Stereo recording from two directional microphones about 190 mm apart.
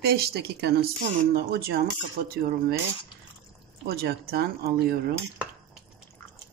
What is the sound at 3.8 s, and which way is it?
Speech, 55° right (ahead or behind).